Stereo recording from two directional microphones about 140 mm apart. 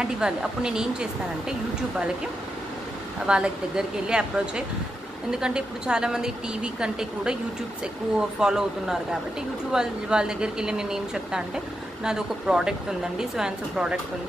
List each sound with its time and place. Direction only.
0.0 s a woman's voice: 5° right (ahead or behind)
3.3 s a woman's voice: 5° right (ahead or behind)
8.4 s a woman's voice: 5° right (ahead or behind)